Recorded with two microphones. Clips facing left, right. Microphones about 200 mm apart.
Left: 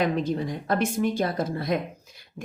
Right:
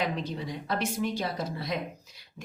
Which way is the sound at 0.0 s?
50° left (ahead or behind).